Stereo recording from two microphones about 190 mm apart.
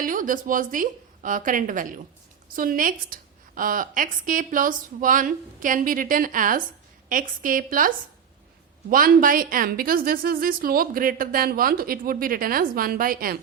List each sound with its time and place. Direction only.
0.0 s a woman's voice: 45° right (ahead or behind)